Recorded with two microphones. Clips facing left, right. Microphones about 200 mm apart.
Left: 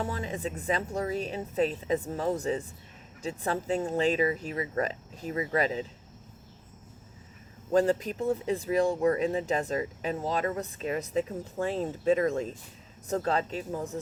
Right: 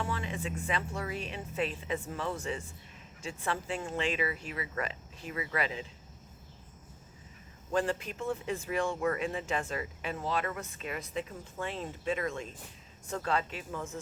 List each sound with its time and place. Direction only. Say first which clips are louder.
0.0 s speech: left 3 dB; 40° left (ahead or behind)
7.7 s speech: left 7 dB; 40° left (ahead or behind)